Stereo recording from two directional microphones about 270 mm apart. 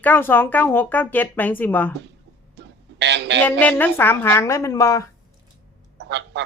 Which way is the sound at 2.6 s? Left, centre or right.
Right.